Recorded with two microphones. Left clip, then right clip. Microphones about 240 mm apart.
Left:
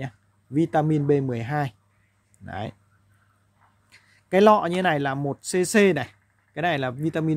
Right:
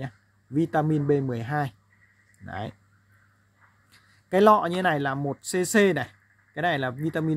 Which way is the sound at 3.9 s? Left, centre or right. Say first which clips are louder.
Left 3 dB; centre.